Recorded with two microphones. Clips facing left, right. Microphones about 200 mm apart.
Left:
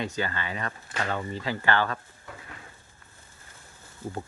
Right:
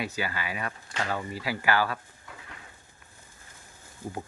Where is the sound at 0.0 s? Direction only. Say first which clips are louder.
Left 2 dB; 10° right (ahead or behind).